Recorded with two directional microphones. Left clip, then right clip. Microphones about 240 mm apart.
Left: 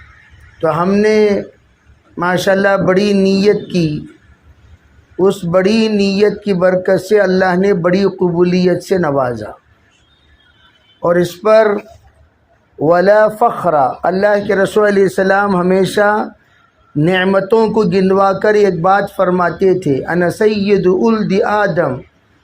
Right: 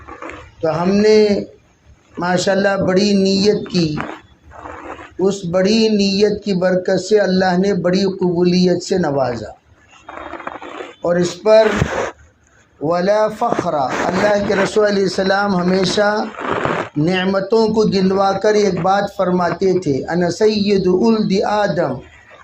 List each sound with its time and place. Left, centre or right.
0.6 s a man's voice: left
5.2 s a man's voice: left
11.0 s a man's voice: left
12.8 s a man's voice: left